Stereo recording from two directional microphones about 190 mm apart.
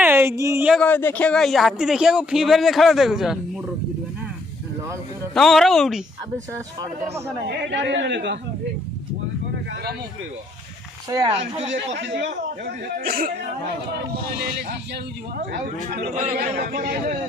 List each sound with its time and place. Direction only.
0.0 s a sound: 10° right (ahead or behind)
0.7 s a man's voice: 5° left (ahead or behind)
5.3 s a man's voice: centre (ahead or behind)
7.4 s a man's voice: 65° right (ahead or behind)
11.1 s speech: 20° right (ahead or behind)
11.9 s speech: 70° right (ahead or behind); by 13.3 s 50° right (ahead or behind)
14.3 s speech: 60° right (ahead or behind)
16.1 s speech: 40° right (ahead or behind)
16.6 s speech: 55° right (ahead or behind)